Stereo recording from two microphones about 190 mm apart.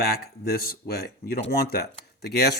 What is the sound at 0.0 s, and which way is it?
Speech, 55° left (ahead or behind).